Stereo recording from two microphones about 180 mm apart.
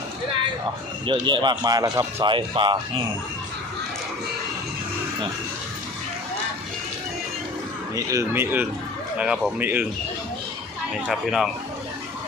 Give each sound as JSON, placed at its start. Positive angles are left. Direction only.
{"t": 1.2, "sound": "speech", "side_deg": -25}
{"t": 7.9, "sound": "a man's voice", "side_deg": -15}
{"t": 10.9, "sound": "speech", "side_deg": 0}